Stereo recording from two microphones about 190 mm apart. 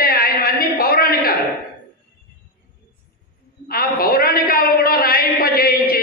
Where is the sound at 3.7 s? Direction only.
50° left (ahead or behind).